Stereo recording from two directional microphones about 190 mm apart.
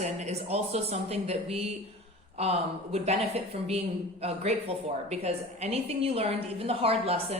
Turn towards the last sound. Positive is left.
turn(degrees=-30)  # may be behind; listen again after turning